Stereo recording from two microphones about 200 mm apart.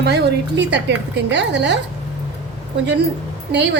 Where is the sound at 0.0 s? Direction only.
55° right (ahead or behind).